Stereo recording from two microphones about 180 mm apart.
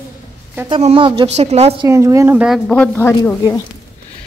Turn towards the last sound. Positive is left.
turn(degrees=15)  # may be behind; listen again after turning